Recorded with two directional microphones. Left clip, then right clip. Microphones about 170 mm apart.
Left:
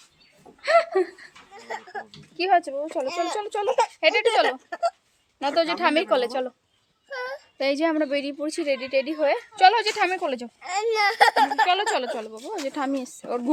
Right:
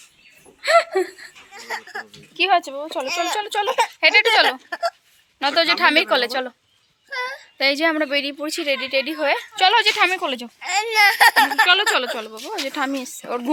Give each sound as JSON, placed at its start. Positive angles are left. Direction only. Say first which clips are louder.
{"t": 0.6, "sound": "a sound", "louder": "right 3 dB", "side_deg": 5}
{"t": 1.5, "sound": "a sound", "louder": "right 4 dB", "side_deg": 15}
{"t": 2.4, "sound": "a woman's voice", "louder": "right 3 dB", "side_deg": 5}
{"t": 4.7, "sound": "hiccup", "louder": "right 2 dB", "side_deg": 0}
{"t": 5.4, "sound": "a woman's voice", "louder": "right 5 dB", "side_deg": 0}
{"t": 7.1, "sound": "child singing", "louder": "right 5 dB", "side_deg": -15}
{"t": 7.6, "sound": "a woman's voice", "louder": "right 4 dB", "side_deg": 0}
{"t": 10.6, "sound": "speech", "louder": "right 6 dB", "side_deg": 15}
{"t": 11.6, "sound": "a woman's voice", "louder": "right 5 dB", "side_deg": -5}